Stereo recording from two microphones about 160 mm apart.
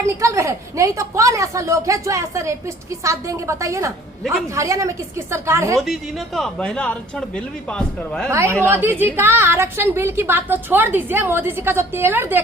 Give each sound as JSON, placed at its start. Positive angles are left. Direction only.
{"t": 0.0, "sound": "a woman's voice", "side_deg": -20}
{"t": 5.8, "sound": "speech", "side_deg": 0}
{"t": 8.3, "sound": "a woman's voice", "side_deg": -15}